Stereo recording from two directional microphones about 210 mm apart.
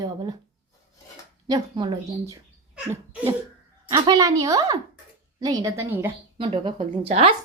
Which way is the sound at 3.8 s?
15° right (ahead or behind).